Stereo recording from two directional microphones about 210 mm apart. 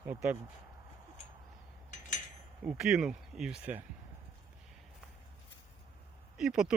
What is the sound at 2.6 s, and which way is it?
Speech, 5° right (ahead or behind).